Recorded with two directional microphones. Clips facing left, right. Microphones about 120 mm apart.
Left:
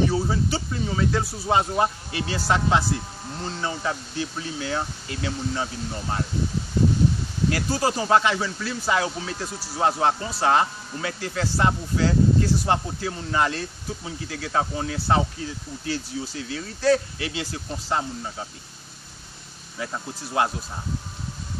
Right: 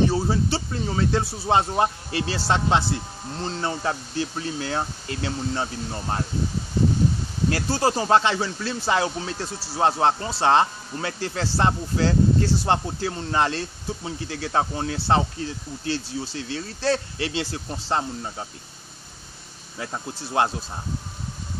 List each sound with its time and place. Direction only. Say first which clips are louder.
0.0 s a man's voice: right 1 dB; 30° right (ahead or behind)
7.4 s a man's voice: right 1 dB; 30° right (ahead or behind)
19.8 s speech: even; 30° right (ahead or behind)